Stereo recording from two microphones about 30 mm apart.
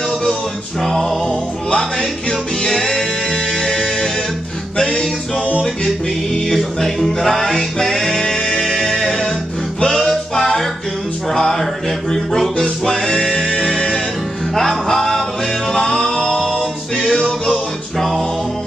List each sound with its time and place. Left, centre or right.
0.8 s music: centre
2.0 s music: left
2.7 s music: centre
6.3 s music: centre
12.8 s music: left
14.6 s music: centre